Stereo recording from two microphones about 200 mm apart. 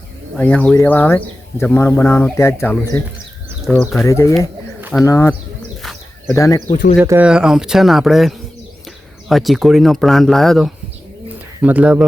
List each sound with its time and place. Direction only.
0.3 s speech: 5° left (ahead or behind)
5.8 s bird: centre (ahead or behind)
6.3 s speech: 15° left (ahead or behind)
7.0 s speech: 10° right (ahead or behind)